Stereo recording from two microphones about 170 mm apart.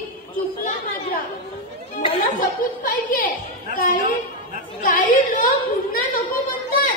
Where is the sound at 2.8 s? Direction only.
55° left (ahead or behind).